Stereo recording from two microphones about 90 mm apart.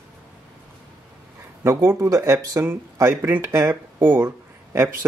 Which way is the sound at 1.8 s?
35° right (ahead or behind).